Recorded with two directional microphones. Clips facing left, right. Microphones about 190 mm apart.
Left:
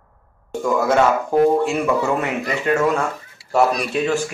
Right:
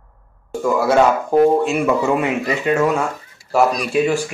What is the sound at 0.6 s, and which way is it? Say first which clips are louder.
Speech: right 2 dB; 5° right (ahead or behind).